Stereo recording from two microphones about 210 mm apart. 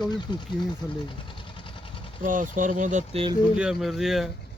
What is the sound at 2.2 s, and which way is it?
Speech, 40° right (ahead or behind).